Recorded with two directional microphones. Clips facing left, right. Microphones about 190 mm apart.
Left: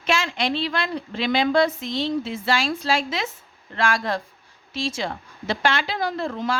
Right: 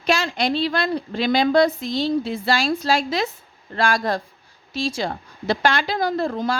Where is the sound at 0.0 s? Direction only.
40° right (ahead or behind).